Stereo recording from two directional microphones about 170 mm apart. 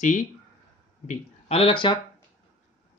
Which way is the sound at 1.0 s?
35° left (ahead or behind).